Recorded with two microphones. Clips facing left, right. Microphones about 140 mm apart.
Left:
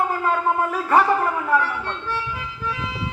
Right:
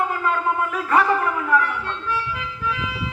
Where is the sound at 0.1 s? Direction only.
35° left (ahead or behind).